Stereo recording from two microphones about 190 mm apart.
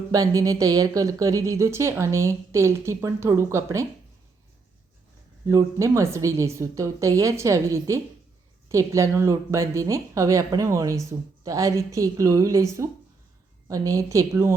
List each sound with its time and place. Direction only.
0.1 s speech: 20° right (ahead or behind)
5.5 s speech: 15° right (ahead or behind)